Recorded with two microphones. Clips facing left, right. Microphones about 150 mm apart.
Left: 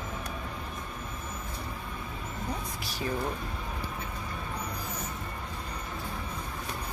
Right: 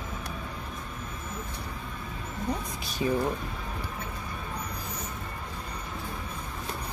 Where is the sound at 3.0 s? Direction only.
10° right (ahead or behind).